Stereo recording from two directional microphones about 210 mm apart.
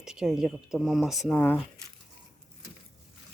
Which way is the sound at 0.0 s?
Centre (ahead or behind).